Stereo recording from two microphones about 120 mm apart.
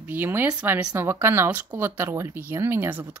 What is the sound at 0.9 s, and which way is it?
A woman's voice, 20° right (ahead or behind).